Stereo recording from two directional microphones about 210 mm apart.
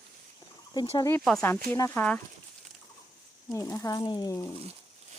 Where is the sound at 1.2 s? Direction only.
5° left (ahead or behind).